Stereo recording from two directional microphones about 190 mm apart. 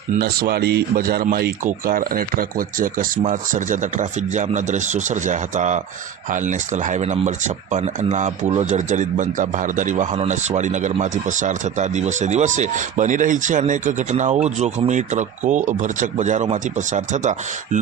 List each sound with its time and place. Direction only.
0.2 s speech: 55° right (ahead or behind)